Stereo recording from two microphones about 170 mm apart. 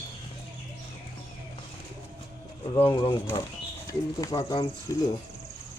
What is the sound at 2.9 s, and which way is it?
Speech, 25° left (ahead or behind).